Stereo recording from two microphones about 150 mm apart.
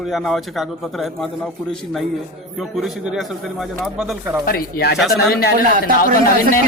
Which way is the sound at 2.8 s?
5° right (ahead or behind).